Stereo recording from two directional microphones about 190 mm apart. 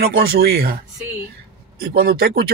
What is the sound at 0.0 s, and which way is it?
Speech, 55° right (ahead or behind).